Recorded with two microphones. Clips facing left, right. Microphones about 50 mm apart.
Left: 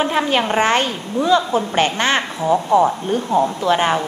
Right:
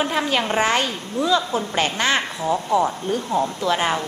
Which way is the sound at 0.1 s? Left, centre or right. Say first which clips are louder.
Left 4 dB; left.